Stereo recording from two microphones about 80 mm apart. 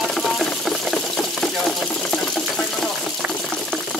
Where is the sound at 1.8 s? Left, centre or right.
Centre.